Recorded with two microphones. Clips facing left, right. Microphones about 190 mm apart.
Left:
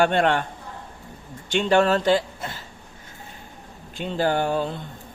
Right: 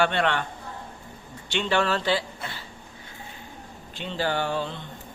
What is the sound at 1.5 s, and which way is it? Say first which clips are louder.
A man's voice: left 6 dB; 45° left (ahead or behind).